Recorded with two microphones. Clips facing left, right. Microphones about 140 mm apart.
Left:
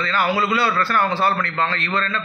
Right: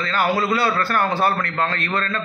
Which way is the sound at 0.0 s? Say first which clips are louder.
Even; 45° right (ahead or behind).